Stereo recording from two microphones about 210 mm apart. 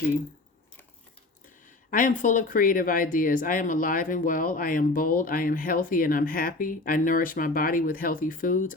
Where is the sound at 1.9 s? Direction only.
40° left (ahead or behind).